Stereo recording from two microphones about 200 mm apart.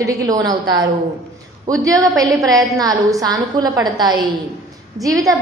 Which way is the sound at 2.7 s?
15° right (ahead or behind).